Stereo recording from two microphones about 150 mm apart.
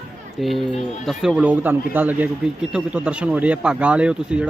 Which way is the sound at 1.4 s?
10° right (ahead or behind).